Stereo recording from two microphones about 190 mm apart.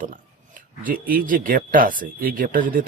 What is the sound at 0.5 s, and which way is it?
A man's voice, 45° right (ahead or behind).